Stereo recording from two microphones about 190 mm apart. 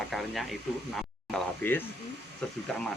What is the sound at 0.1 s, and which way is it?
Radio, centre (ahead or behind).